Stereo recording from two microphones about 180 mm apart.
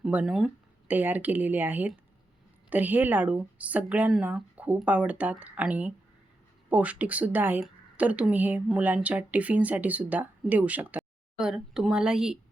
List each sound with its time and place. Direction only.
0.0 s a woman's voice: 5° right (ahead or behind)